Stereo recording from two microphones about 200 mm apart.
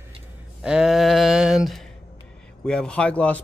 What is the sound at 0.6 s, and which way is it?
Speech, 5° right (ahead or behind).